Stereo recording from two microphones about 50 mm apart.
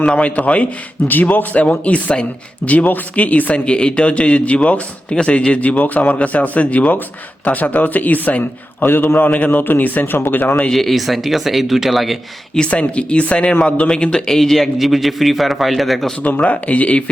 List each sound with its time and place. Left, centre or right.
0.0 s a man's voice: left
3.7 s a man's voice: centre; by 10.2 s left
10.2 s speech: left
10.7 s speech: centre
12.5 s speech: left; by 16.1 s centre
16.2 s a man's voice: left